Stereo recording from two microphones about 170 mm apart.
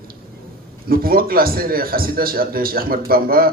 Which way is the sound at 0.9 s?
60° right (ahead or behind).